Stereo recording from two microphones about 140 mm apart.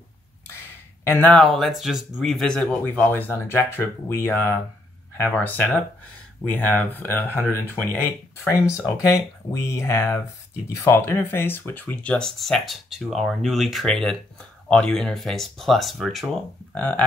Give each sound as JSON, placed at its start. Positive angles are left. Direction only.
{"t": 1.0, "sound": "speech", "side_deg": 10}
{"t": 16.7, "sound": "speech", "side_deg": 10}